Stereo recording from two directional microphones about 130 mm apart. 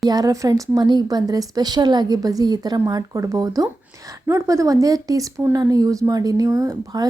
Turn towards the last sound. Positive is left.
turn(degrees=-30)  # may be behind; listen again after turning